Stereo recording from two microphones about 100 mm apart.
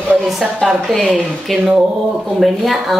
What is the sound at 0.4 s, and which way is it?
Speech, centre (ahead or behind).